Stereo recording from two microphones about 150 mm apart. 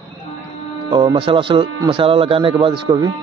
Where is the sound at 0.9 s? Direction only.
30° right (ahead or behind).